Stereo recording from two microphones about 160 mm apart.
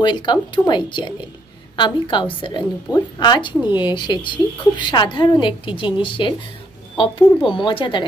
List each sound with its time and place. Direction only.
0.0 s a woman's voice: 30° left (ahead or behind)